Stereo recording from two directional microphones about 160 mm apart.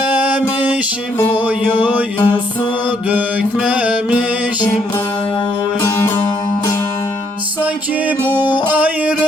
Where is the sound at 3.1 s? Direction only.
10° right (ahead or behind).